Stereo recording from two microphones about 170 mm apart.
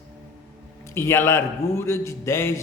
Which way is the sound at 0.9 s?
15° left (ahead or behind).